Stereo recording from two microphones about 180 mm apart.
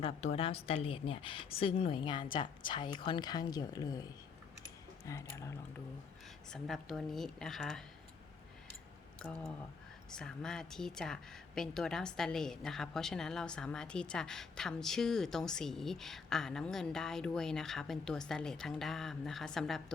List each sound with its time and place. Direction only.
0.0 s a woman's voice: 35° left (ahead or behind)
5.0 s speech: 15° left (ahead or behind)
6.5 s a woman's voice: centre (ahead or behind)
9.2 s a woman's voice: 5° left (ahead or behind)